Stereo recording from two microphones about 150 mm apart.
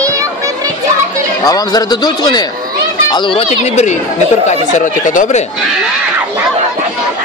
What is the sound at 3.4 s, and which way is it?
Speech, 50° left (ahead or behind).